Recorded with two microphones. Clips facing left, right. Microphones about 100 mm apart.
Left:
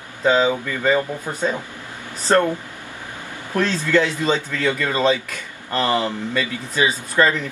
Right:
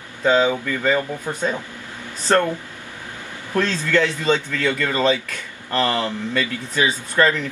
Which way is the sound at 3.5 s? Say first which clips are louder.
Left 1 dB; 10° left (ahead or behind).